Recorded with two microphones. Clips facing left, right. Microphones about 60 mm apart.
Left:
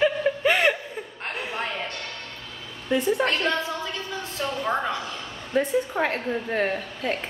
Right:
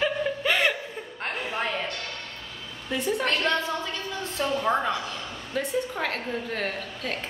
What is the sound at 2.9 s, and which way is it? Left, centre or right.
Speech, centre.